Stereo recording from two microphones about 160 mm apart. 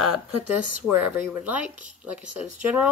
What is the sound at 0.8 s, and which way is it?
Speech, 10° right (ahead or behind).